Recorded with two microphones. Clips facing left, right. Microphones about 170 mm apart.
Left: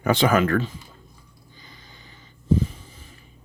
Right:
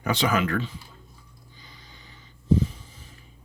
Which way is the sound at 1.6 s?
50° left (ahead or behind).